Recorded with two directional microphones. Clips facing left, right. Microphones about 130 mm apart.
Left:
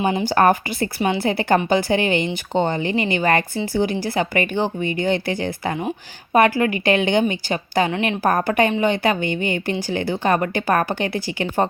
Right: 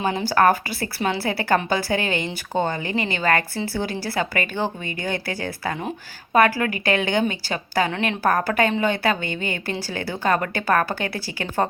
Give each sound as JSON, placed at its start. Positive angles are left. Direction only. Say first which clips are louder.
{"t": 0.0, "sound": "speech", "louder": "left 2 dB", "side_deg": 20}